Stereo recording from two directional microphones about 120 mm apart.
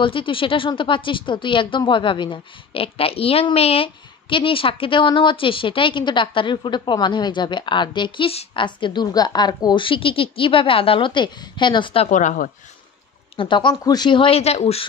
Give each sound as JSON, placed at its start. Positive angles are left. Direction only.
{"t": 0.0, "sound": "speech", "side_deg": 45}
{"t": 12.1, "sound": "a woman's voice", "side_deg": 90}
{"t": 13.4, "sound": "speech", "side_deg": 40}
{"t": 14.4, "sound": "speech", "side_deg": 60}